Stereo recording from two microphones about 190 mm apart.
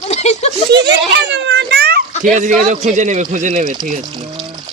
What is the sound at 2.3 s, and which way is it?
A man's voice, 40° right (ahead or behind).